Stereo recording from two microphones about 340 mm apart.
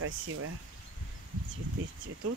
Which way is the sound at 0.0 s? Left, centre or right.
Right.